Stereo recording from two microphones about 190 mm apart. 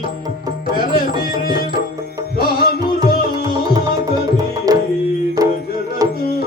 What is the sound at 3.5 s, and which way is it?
Tabla, 20° right (ahead or behind).